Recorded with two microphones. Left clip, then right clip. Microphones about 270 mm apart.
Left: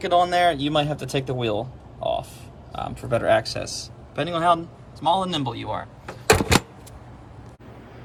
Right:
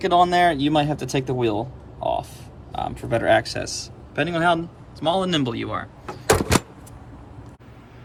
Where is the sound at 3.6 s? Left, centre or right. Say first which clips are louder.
Right 2 dB; right.